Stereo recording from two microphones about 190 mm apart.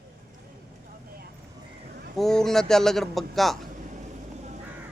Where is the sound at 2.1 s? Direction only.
Centre (ahead or behind).